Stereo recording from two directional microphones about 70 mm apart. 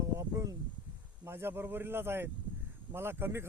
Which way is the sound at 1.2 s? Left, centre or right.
Right.